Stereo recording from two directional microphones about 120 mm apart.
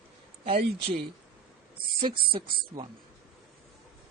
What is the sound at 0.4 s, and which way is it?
Speech, 50° right (ahead or behind).